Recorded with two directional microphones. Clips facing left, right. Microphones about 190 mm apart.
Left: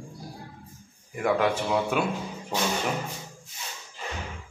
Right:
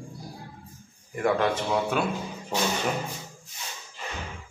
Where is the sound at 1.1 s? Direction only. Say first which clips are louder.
Even; 5° left (ahead or behind).